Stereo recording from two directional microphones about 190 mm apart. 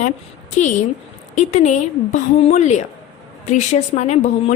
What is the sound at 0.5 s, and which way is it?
A woman's voice, 40° left (ahead or behind).